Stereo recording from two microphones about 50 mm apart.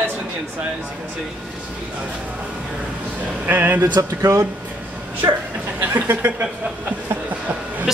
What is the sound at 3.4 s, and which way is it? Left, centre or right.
Speech, right.